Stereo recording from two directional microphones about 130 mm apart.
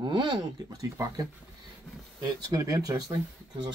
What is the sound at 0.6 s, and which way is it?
Speech, 25° right (ahead or behind).